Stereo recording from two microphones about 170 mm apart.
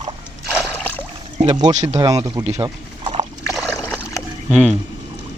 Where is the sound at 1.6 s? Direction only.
25° right (ahead or behind).